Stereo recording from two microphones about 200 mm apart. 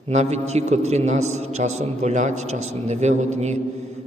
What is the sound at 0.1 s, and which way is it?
A man's voice, 35° right (ahead or behind).